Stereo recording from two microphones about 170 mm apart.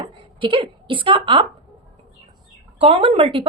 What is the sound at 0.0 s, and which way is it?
Speech, 30° right (ahead or behind).